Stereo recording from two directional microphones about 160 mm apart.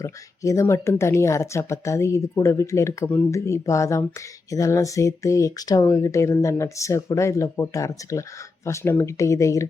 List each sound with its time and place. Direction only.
0.0 s speech: 20° left (ahead or behind)